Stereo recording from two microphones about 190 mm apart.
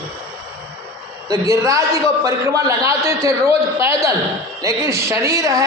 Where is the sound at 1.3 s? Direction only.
15° right (ahead or behind).